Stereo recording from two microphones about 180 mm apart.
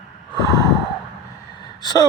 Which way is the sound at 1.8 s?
25° left (ahead or behind).